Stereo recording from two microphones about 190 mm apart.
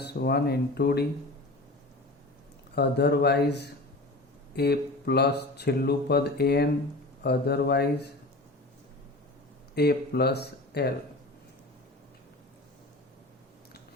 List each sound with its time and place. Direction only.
0.0 s speech: 55° left (ahead or behind)
2.7 s speech: 60° left (ahead or behind)
9.7 s speech: 55° left (ahead or behind)